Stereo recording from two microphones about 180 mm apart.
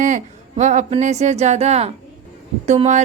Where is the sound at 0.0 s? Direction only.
45° right (ahead or behind).